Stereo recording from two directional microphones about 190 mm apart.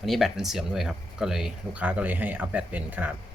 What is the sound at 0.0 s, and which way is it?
Speech, centre (ahead or behind).